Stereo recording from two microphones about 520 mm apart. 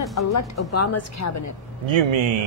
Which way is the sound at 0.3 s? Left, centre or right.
Left.